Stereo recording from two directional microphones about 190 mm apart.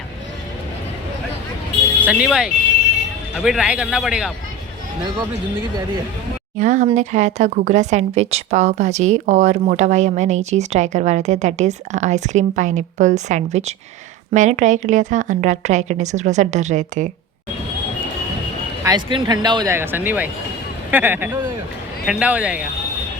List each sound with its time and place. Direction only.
2.0 s a man's voice: 5° right (ahead or behind)
6.6 s speech: 40° right (ahead or behind)
18.8 s speech: 20° right (ahead or behind); by 22.6 s 5° right (ahead or behind)